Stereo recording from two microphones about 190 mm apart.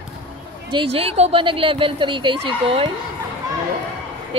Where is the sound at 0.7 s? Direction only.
30° right (ahead or behind).